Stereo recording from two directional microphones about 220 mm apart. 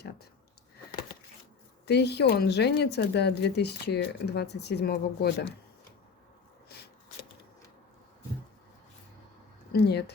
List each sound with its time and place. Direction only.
1.9 s speech: 50° left (ahead or behind)
6.7 s a sound: 45° left (ahead or behind)
9.7 s speech: 50° left (ahead or behind)